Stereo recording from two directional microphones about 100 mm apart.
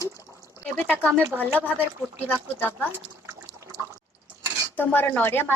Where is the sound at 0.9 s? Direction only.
10° left (ahead or behind).